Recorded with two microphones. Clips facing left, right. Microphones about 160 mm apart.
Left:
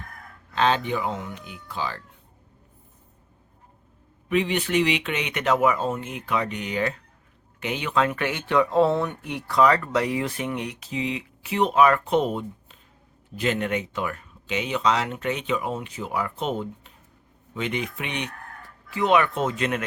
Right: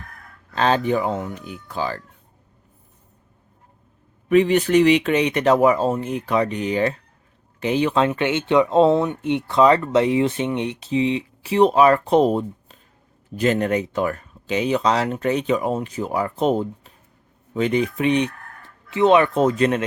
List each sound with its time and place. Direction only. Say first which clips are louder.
0.5 s speech: right 4 dB; 40° right (ahead or behind)
4.3 s speech: right 8 dB; 45° right (ahead or behind)